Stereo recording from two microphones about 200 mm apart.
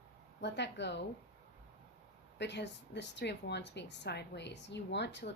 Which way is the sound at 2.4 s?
60° left (ahead or behind).